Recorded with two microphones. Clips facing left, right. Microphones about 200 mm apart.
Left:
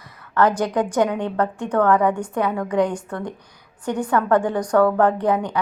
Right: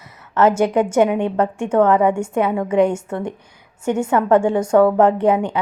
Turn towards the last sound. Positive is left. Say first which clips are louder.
# right 4 dB
turn(degrees=-25)  # may be behind; listen again after turning